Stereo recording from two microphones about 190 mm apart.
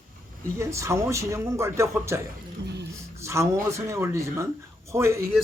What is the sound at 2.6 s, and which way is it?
Music, 65° right (ahead or behind).